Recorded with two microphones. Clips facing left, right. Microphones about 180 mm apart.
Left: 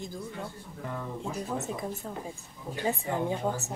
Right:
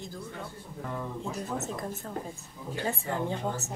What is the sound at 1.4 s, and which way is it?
A woman's voice, 5° left (ahead or behind).